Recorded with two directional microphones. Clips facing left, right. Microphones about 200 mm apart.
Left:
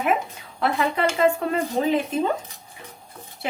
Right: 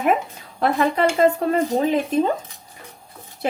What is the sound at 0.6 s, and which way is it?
Speech, 40° right (ahead or behind).